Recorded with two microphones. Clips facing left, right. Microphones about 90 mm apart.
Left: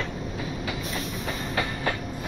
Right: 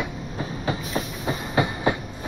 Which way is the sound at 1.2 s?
20° right (ahead or behind).